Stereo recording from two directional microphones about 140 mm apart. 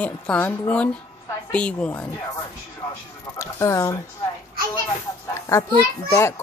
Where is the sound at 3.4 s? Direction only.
20° left (ahead or behind).